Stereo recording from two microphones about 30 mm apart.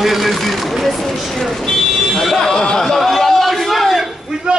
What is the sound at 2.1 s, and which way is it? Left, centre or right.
Speech, centre.